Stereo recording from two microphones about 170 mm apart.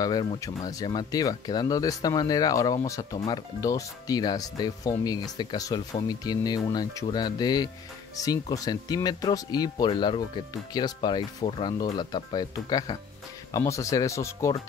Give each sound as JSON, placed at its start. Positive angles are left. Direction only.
{"t": 0.0, "sound": "speech", "side_deg": 25}